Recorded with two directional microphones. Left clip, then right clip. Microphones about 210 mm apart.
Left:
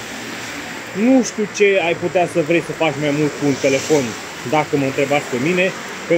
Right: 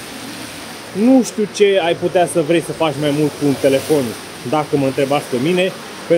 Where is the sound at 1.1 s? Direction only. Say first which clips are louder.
Right 2 dB; 20° right (ahead or behind).